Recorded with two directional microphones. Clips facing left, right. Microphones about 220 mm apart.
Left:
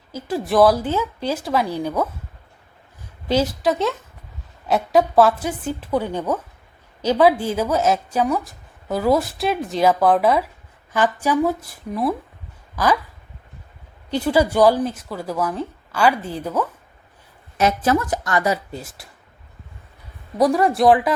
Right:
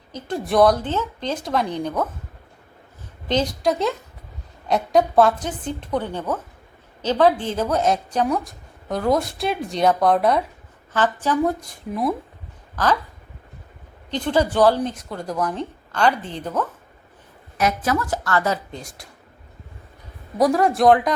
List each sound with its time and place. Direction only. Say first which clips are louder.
0.1 s speech: left 2 dB; 5° left (ahead or behind)
3.2 s a woman's voice: left 2 dB; 5° left (ahead or behind)
12.7 s speech: left 2 dB; 10° left (ahead or behind)
14.1 s speech: left 2 dB; 10° left (ahead or behind)
17.6 s speech: left 3 dB; 30° left (ahead or behind); by 19.0 s 5° left (ahead or behind)
20.4 s a woman's voice: left 1 dB; centre (ahead or behind)